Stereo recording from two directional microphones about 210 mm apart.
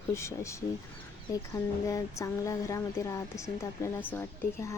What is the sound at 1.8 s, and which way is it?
Speech, 15° left (ahead or behind).